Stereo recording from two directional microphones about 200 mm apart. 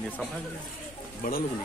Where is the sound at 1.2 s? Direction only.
40° left (ahead or behind).